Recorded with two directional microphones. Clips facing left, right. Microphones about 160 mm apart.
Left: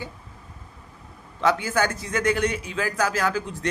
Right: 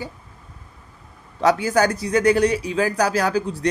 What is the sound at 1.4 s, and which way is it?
Speech, 40° right (ahead or behind).